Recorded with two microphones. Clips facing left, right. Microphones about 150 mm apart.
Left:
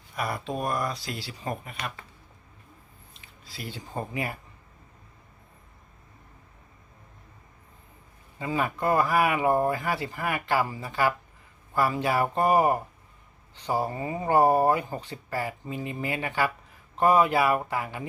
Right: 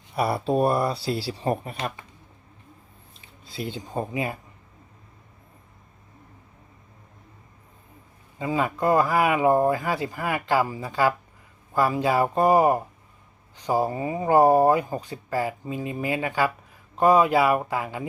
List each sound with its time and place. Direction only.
0.2 s speech: 30° right (ahead or behind)
3.4 s speech: 25° right (ahead or behind)
8.4 s speech: 20° right (ahead or behind)